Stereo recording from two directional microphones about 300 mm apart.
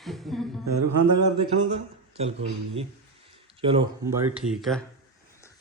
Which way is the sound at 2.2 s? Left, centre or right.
Centre.